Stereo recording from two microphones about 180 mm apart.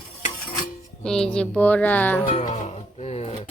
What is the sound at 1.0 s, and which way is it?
Speech, 5° left (ahead or behind).